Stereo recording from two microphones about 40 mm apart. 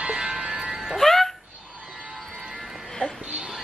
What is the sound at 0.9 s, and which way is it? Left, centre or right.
Music, centre.